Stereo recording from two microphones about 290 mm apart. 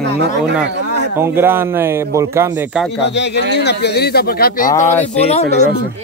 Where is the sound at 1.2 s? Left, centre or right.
Centre.